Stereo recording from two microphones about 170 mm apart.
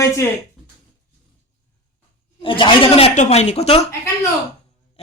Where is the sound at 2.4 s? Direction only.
30° left (ahead or behind).